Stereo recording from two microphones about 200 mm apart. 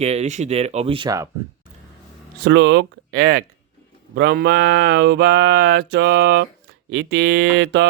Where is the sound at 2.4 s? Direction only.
60° right (ahead or behind).